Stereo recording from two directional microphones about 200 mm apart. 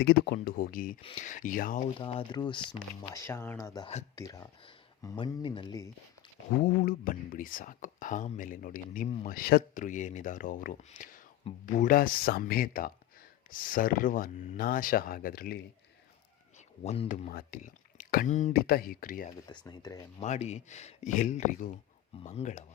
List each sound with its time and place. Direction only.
0.0 s speech: 55° left (ahead or behind)
2.0 s speech: 25° left (ahead or behind); by 3.8 s 10° left (ahead or behind)
3.8 s speech: 30° left (ahead or behind)
4.1 s speech: 15° left (ahead or behind)
6.6 s speech: 45° left (ahead or behind)
16.8 s speech: 35° left (ahead or behind)
19.5 s speech: 20° left (ahead or behind)
20.2 s speech: 35° left (ahead or behind)